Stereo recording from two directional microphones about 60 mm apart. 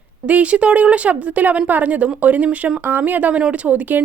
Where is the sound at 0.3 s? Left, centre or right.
Right.